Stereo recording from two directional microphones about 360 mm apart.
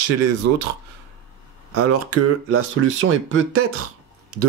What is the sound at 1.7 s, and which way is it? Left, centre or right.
Speech, right.